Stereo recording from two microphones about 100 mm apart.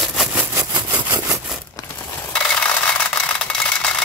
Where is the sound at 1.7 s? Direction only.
35° left (ahead or behind).